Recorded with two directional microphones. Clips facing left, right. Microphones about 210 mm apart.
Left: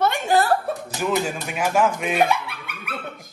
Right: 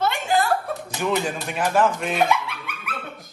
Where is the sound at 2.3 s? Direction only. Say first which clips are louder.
Right 1 dB; 30° left (ahead or behind).